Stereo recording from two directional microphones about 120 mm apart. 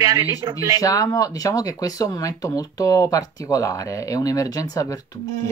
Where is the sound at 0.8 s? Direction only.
30° left (ahead or behind).